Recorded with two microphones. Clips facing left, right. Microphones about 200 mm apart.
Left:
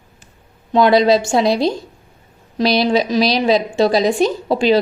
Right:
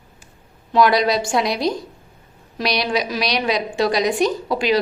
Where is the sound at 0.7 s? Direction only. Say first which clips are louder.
Left 4 dB; 25° left (ahead or behind).